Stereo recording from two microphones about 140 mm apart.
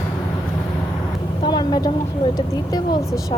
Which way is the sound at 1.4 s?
30° left (ahead or behind).